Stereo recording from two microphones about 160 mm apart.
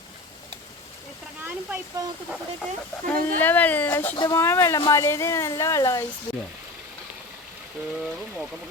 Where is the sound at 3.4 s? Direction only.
10° left (ahead or behind).